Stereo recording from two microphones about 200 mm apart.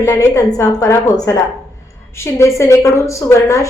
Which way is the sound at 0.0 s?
15° left (ahead or behind).